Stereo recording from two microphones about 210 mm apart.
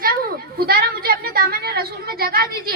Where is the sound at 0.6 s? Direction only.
45° right (ahead or behind).